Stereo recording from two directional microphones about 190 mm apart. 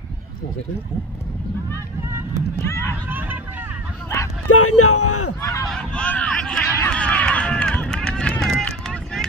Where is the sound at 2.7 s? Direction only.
15° left (ahead or behind).